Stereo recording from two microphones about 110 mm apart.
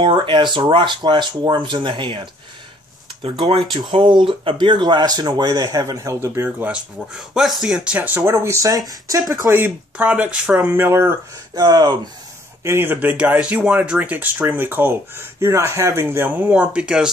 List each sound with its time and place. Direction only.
0.0 s speech: 45° right (ahead or behind); by 9.6 s 30° right (ahead or behind)
9.6 s speech: 10° right (ahead or behind)
11.6 s speech: 40° right (ahead or behind)
12.6 s speech: 20° right (ahead or behind)